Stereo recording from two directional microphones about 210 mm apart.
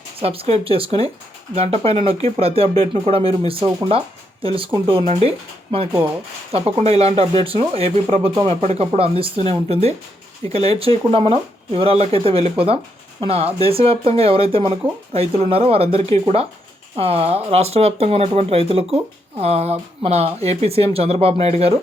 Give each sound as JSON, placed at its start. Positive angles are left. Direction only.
{"t": 0.2, "sound": "speech", "side_deg": -30}
{"t": 6.5, "sound": "speech", "side_deg": -30}